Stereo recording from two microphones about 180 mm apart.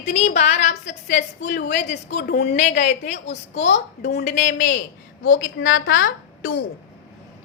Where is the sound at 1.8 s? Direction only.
40° left (ahead or behind).